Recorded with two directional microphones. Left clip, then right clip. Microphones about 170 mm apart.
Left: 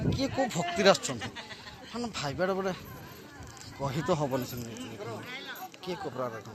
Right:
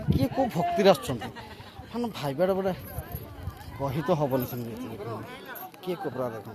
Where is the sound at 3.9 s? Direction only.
15° right (ahead or behind).